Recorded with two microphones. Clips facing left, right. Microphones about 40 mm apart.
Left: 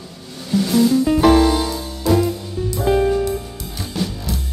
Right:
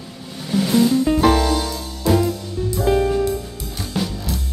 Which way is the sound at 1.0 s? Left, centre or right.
Centre.